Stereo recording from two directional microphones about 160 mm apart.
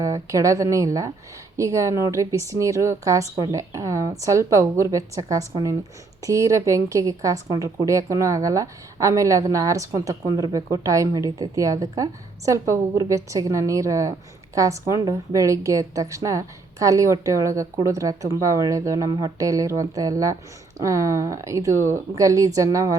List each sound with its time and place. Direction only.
0.0 s a woman's voice: 20° right (ahead or behind)